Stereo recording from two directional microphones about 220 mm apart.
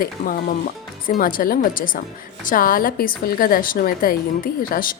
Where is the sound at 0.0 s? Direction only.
40° left (ahead or behind).